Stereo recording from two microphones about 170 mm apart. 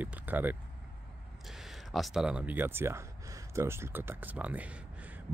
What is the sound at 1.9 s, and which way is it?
Speech, centre (ahead or behind).